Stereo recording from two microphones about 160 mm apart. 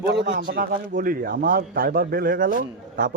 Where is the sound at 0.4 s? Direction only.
55° right (ahead or behind).